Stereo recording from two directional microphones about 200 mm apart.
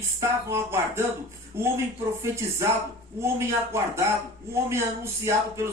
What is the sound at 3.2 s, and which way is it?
A woman's voice, 15° right (ahead or behind).